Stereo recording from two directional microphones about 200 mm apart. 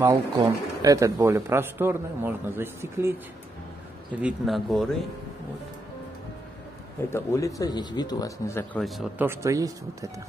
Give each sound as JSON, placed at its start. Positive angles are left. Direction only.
{"t": 0.0, "sound": "speech", "side_deg": -20}
{"t": 7.1, "sound": "speech", "side_deg": 15}
{"t": 8.8, "sound": "speech", "side_deg": 0}
{"t": 9.3, "sound": "speech", "side_deg": -15}